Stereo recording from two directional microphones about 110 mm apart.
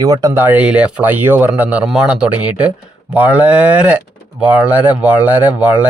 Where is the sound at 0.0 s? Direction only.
30° right (ahead or behind).